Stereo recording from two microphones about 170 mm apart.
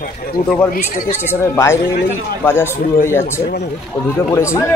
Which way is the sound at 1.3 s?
15° left (ahead or behind).